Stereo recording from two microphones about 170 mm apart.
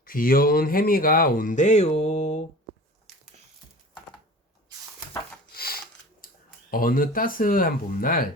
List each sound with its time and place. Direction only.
0.0 s speech: 55° left (ahead or behind)
5.5 s a sound: 60° left (ahead or behind)
6.2 s speech: 55° left (ahead or behind)